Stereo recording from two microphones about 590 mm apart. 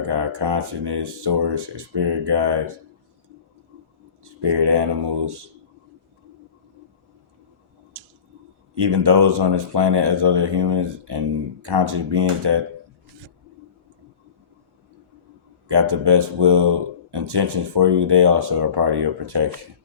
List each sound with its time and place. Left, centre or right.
0.0 s speech: right
4.2 s speech: right
8.7 s speech: right
15.6 s speech: right